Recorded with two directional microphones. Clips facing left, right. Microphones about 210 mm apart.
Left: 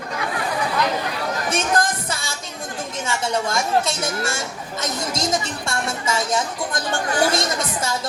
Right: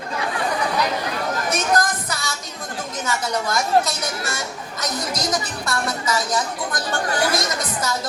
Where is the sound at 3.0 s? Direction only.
30° left (ahead or behind).